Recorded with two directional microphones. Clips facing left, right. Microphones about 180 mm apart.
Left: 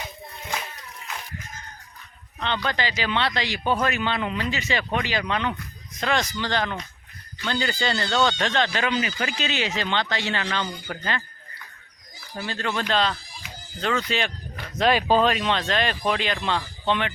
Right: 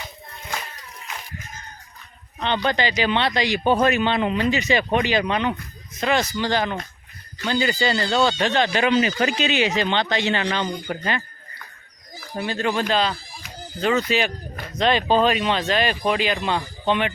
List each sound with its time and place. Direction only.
2.4 s speech: 20° right (ahead or behind)
5.9 s speech: 5° right (ahead or behind); by 9.1 s 25° right (ahead or behind)
9.4 s speech: 15° right (ahead or behind)
12.4 s speech: 15° right (ahead or behind)
14.8 s speech: 5° left (ahead or behind)
15.3 s speech: 5° right (ahead or behind)